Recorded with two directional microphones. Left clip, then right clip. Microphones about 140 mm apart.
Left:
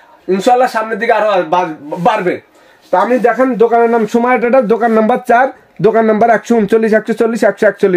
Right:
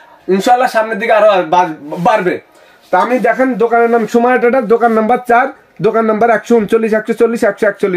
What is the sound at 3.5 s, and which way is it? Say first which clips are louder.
Speech: left 1 dB; 35° left (ahead or behind).